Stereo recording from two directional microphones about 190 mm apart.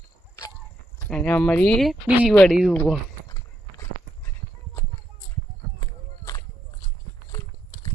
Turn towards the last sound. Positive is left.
turn(degrees=20)  # may be behind; listen again after turning